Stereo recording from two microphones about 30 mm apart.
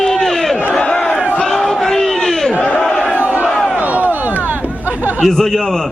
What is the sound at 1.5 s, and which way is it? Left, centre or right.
Battle cry, centre.